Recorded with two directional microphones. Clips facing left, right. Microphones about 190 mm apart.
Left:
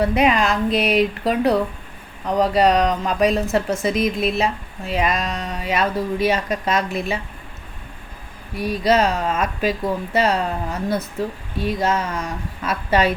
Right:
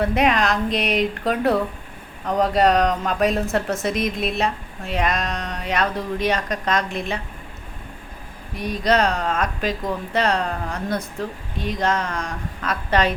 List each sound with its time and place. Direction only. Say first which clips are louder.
0.0 s a woman's voice: left 2 dB; centre (ahead or behind)
8.5 s a woman's voice: left 2 dB; 5° left (ahead or behind)